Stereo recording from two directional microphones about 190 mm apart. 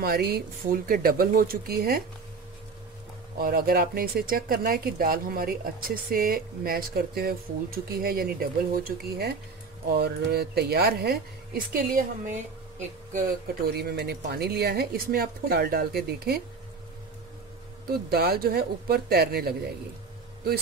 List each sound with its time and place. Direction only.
0.0 s speech: 55° right (ahead or behind)
3.3 s a woman's voice: 50° right (ahead or behind)
13.7 s a woman's voice: 55° right (ahead or behind)
17.8 s a woman's voice: 55° right (ahead or behind)